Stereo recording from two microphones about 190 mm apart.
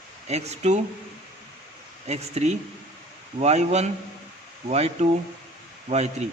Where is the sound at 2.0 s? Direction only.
35° right (ahead or behind).